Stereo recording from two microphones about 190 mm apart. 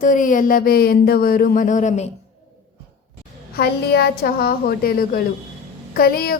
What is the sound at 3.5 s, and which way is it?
Speech, 55° left (ahead or behind).